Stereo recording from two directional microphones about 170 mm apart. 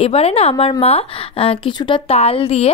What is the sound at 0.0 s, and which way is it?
A woman's voice, 35° left (ahead or behind).